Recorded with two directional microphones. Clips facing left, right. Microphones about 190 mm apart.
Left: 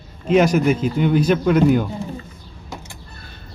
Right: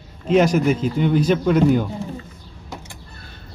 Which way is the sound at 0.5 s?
10° left (ahead or behind).